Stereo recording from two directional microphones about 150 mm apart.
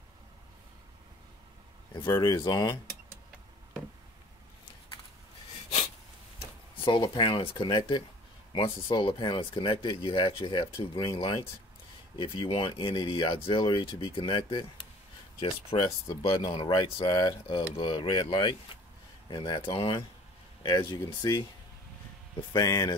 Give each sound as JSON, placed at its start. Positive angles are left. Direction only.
{"t": 2.0, "sound": "speech", "side_deg": 25}
{"t": 6.8, "sound": "speech", "side_deg": 30}
{"t": 22.5, "sound": "speech", "side_deg": 25}